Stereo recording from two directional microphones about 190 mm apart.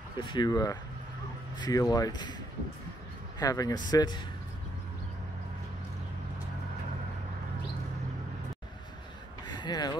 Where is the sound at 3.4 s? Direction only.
20° left (ahead or behind).